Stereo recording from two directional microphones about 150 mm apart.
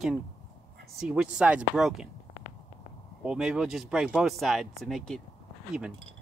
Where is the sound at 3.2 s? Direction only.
5° right (ahead or behind).